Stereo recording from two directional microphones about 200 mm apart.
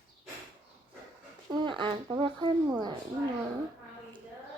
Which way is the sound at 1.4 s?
25° right (ahead or behind).